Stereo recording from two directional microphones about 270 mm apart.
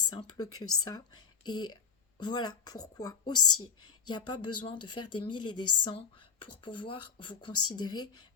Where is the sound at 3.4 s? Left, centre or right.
Left.